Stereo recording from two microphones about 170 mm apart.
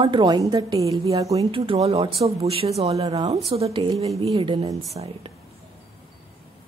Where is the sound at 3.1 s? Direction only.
20° right (ahead or behind).